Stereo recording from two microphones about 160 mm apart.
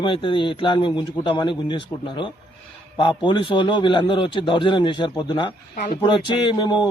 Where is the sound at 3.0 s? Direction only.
30° left (ahead or behind).